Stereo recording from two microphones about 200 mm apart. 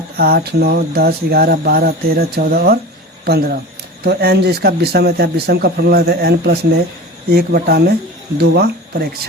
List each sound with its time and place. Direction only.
0.2 s a man's voice: 50° right (ahead or behind)